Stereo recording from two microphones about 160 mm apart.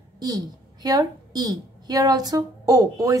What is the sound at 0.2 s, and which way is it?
A woman's voice, 25° right (ahead or behind).